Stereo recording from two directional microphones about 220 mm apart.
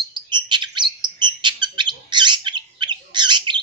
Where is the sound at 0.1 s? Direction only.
20° right (ahead or behind).